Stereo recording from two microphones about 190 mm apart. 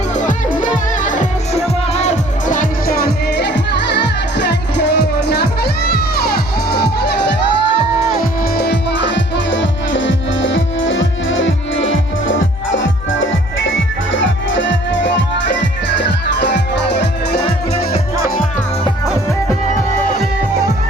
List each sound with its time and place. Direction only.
0.2 s music: 45° left (ahead or behind)
8.1 s music: 55° left (ahead or behind)